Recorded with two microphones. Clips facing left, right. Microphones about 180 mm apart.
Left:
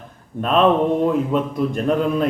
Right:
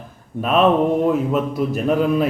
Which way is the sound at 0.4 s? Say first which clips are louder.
Even; 5° right (ahead or behind).